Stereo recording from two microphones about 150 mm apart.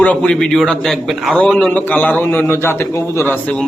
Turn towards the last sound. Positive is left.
turn(degrees=10)  # may be behind; listen again after turning